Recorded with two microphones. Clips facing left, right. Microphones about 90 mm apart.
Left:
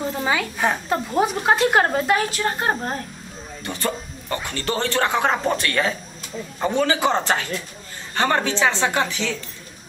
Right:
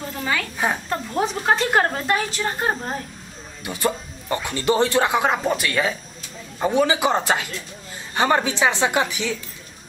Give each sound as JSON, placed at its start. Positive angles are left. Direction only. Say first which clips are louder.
{"t": 0.2, "sound": "a sound", "louder": "left 1 dB", "side_deg": 15}
{"t": 0.8, "sound": "a woman's voice", "louder": "left 3 dB", "side_deg": 5}
{"t": 3.6, "sound": "speech", "louder": "right 2 dB", "side_deg": -15}